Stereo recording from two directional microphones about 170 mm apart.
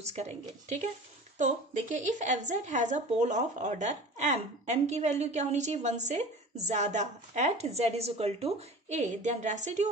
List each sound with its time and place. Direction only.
0.0 s a woman's voice: 40° right (ahead or behind)